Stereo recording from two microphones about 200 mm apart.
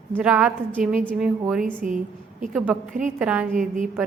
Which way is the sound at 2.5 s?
Centre (ahead or behind).